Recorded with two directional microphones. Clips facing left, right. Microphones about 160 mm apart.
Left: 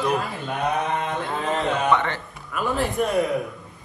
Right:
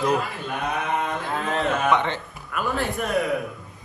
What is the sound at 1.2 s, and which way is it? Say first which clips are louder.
Speech: even; centre (ahead or behind).